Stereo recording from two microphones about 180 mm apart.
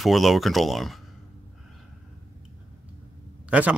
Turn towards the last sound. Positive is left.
turn(degrees=-10)  # may be behind; listen again after turning